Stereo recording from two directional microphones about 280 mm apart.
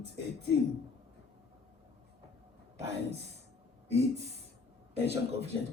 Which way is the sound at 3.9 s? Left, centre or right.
Right.